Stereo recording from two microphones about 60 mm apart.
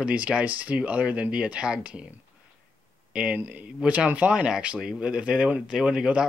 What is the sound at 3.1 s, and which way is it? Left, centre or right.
Speech, centre.